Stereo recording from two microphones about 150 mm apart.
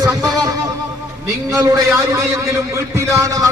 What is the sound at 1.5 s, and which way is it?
A man's voice, 20° right (ahead or behind).